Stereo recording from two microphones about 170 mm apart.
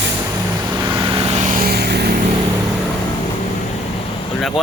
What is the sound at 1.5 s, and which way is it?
Vehicle, 60° right (ahead or behind).